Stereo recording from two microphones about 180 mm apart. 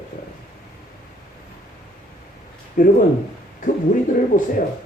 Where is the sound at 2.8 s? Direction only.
45° left (ahead or behind).